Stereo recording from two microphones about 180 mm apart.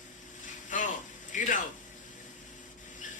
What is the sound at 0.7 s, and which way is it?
Speech, 45° left (ahead or behind).